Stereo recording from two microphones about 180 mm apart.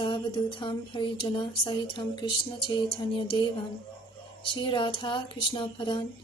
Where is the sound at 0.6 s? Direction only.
25° left (ahead or behind).